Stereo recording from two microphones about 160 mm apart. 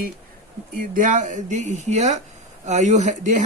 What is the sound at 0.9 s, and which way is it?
Speech, 55° right (ahead or behind).